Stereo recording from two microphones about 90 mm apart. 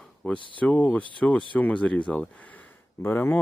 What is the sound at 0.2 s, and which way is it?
Speech, 15° left (ahead or behind).